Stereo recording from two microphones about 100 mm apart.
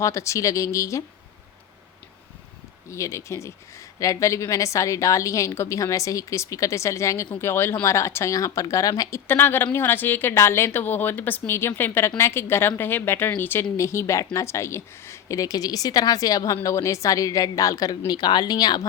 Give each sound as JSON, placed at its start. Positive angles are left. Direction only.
{"t": 0.0, "sound": "speech", "side_deg": 30}
{"t": 2.9, "sound": "a woman's voice", "side_deg": 30}